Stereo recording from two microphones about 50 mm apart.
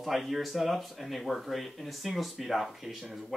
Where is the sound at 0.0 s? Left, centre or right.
Centre.